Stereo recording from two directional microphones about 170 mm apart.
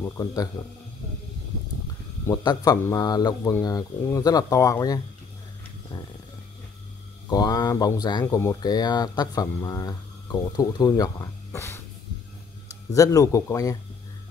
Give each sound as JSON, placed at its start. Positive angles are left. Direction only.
{"t": 0.0, "sound": "speech", "side_deg": 20}
{"t": 2.2, "sound": "speech", "side_deg": 20}
{"t": 7.2, "sound": "speech", "side_deg": 20}
{"t": 12.9, "sound": "speech", "side_deg": 20}